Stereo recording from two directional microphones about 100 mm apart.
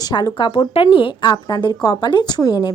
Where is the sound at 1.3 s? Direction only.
45° left (ahead or behind).